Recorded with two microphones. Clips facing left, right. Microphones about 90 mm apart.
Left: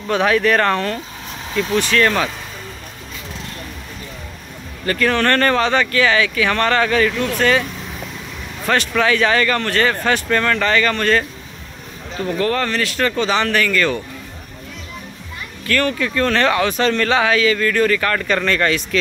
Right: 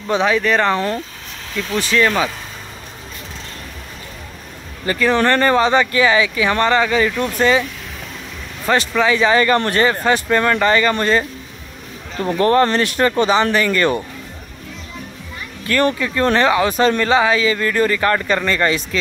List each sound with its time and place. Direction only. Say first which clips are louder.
0.1 s speech: even; centre (ahead or behind)
1.5 s speech: left 2 dB; 5° left (ahead or behind)
4.8 s speech: right 1 dB; 10° right (ahead or behind)
8.6 s speech: right 1 dB; 5° right (ahead or behind)
12.2 s speech: right 5 dB; 30° right (ahead or behind)
15.6 s speech: right 2 dB; 25° right (ahead or behind)
17.1 s speech: right 2 dB; 5° right (ahead or behind)
17.5 s speech: left 1 dB; 20° right (ahead or behind)